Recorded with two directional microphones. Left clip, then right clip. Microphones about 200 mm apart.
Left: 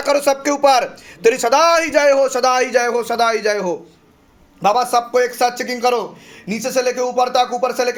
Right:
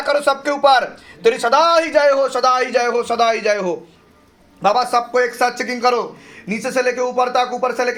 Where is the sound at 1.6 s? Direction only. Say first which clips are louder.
Left 1 dB; 55° left (ahead or behind); by 3.3 s 85° left.